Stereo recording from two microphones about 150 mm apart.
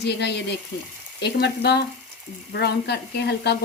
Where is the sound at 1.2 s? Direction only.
90° left.